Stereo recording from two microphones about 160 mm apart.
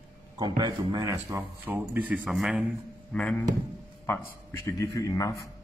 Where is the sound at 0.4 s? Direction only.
25° right (ahead or behind); by 3.4 s 5° left (ahead or behind).